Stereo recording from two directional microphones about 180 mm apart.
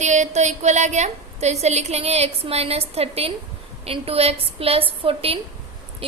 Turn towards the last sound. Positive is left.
turn(degrees=-30)  # may be behind; listen again after turning